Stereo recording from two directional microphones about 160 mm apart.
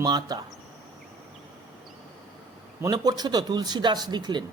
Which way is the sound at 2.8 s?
25° right (ahead or behind).